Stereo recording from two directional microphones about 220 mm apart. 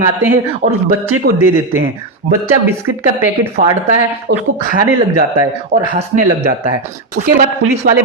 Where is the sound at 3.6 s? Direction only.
35° right (ahead or behind).